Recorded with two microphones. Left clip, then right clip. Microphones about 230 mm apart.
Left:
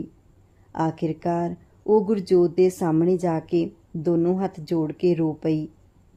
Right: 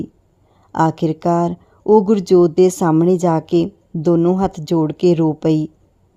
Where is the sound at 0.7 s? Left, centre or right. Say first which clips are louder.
Right 9 dB; right.